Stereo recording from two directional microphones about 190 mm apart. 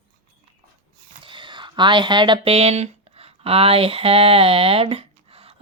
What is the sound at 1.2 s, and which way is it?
Speech, 25° right (ahead or behind).